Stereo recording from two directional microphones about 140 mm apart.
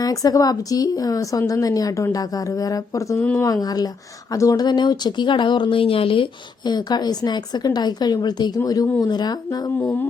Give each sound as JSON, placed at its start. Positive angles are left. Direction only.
{"t": 0.0, "sound": "speech", "side_deg": 25}
{"t": 3.2, "sound": "music", "side_deg": 15}
{"t": 3.4, "sound": "speech", "side_deg": 25}
{"t": 9.7, "sound": "music", "side_deg": 15}